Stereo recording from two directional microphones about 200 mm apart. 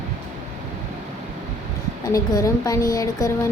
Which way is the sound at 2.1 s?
15° left (ahead or behind).